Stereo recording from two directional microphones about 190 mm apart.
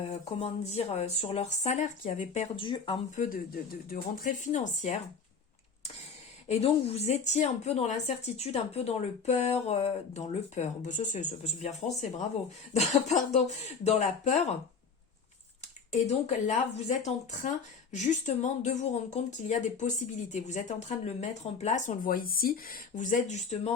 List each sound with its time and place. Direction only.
0.0 s a woman's voice: 35° left (ahead or behind)
3.8 s speech: 45° left (ahead or behind)
6.5 s a woman's voice: 30° left (ahead or behind)
16.0 s a woman's voice: 35° left (ahead or behind)